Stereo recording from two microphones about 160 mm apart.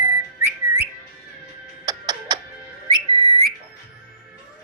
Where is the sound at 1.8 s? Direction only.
25° right (ahead or behind).